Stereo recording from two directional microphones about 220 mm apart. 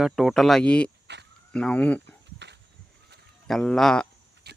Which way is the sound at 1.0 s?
50° right (ahead or behind).